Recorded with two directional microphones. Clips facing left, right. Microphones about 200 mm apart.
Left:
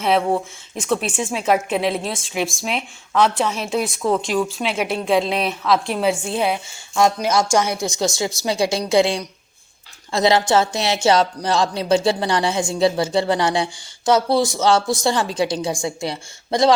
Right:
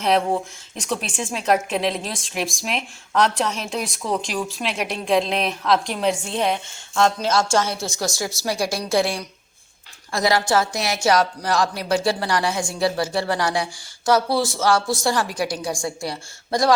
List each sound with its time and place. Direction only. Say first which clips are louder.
0.8 s a woman's voice: left 5 dB; 5° left (ahead or behind); by 16.7 s 25° left (ahead or behind)